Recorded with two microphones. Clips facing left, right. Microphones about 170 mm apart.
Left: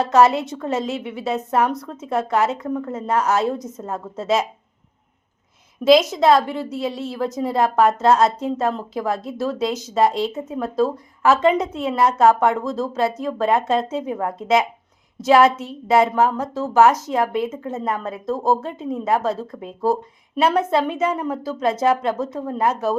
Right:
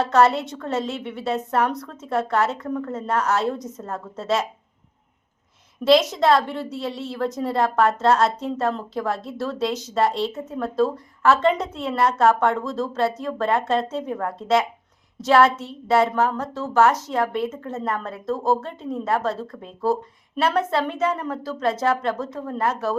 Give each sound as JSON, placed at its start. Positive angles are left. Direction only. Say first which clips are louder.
{"t": 0.1, "sound": "speech", "louder": "left 4 dB", "side_deg": 10}
{"t": 5.8, "sound": "speech", "louder": "left 3 dB", "side_deg": 10}